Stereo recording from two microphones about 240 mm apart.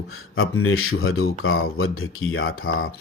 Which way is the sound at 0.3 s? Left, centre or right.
Left.